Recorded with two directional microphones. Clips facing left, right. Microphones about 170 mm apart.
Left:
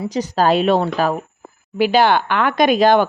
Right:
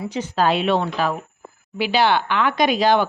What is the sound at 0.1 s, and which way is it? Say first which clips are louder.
Speech: left 4 dB; 40° left (ahead or behind).